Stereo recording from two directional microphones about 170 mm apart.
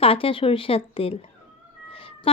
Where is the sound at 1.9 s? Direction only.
35° left (ahead or behind).